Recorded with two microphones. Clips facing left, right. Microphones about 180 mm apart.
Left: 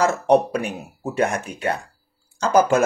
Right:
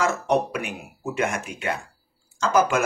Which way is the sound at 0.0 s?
35° left (ahead or behind).